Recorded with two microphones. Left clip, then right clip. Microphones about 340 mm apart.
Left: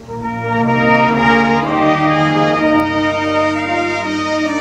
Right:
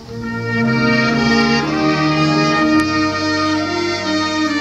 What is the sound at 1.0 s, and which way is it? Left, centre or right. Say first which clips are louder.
Music: left 4 dB; centre.